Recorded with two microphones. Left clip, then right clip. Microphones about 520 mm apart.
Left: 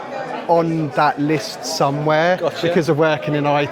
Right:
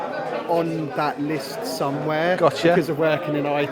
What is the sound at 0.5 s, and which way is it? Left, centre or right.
Speech, left.